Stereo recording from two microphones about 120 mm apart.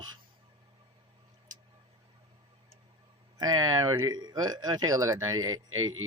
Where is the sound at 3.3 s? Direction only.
30° right (ahead or behind).